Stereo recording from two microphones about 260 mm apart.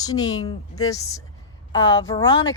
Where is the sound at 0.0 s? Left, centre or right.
Centre.